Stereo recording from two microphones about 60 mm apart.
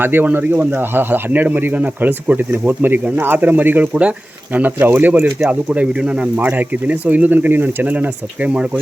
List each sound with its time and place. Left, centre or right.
0.0 s speech: right
5.5 s speech: right
6.3 s speech: right